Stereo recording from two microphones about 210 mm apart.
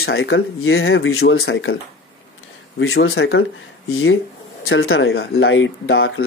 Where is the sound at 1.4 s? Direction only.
50° left (ahead or behind).